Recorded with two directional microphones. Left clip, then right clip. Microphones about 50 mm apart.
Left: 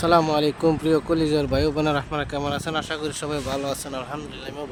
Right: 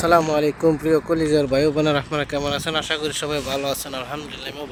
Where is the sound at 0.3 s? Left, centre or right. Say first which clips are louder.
Right 2 dB; right.